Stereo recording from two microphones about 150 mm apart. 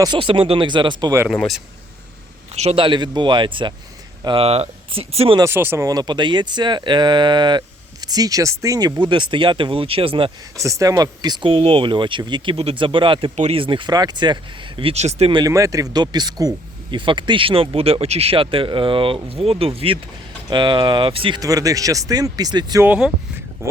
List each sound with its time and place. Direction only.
0.0 s speech: 35° right (ahead or behind)
1.3 s speech: centre (ahead or behind)
2.5 s speech: 45° right (ahead or behind)
5.4 s speech: 15° right (ahead or behind); by 10.3 s 35° right (ahead or behind)
10.6 s speech: 20° right (ahead or behind); by 15.3 s 45° right (ahead or behind)
15.3 s speech: 25° right (ahead or behind)
21.4 s speech: 20° right (ahead or behind)
22.9 s speech: 5° right (ahead or behind)